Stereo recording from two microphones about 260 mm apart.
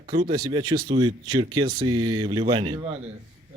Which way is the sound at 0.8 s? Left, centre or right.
Right.